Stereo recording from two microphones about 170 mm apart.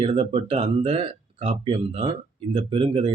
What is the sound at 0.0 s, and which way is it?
Speech, 30° right (ahead or behind).